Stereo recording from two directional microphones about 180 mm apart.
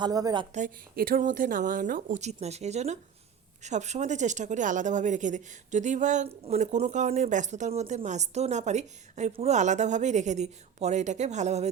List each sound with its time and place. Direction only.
0.0 s a woman's voice: 20° right (ahead or behind)
0.5 s speech: 50° right (ahead or behind)